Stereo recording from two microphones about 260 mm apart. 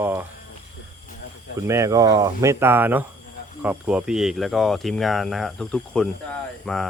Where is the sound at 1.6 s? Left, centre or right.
Centre.